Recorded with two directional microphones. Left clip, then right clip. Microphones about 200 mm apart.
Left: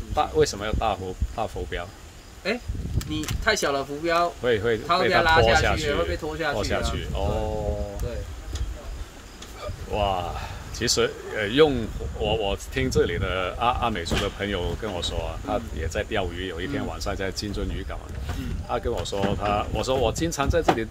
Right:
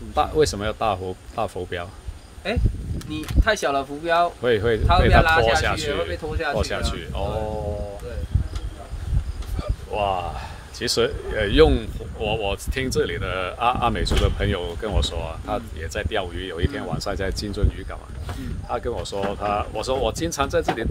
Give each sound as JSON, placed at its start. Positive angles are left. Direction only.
{"t": 0.1, "sound": "speech", "side_deg": -20}
{"t": 3.4, "sound": "speech", "side_deg": 10}
{"t": 4.4, "sound": "speech", "side_deg": -25}
{"t": 5.9, "sound": "speech", "side_deg": 15}
{"t": 6.5, "sound": "speech", "side_deg": -20}
{"t": 9.6, "sound": "speech", "side_deg": -15}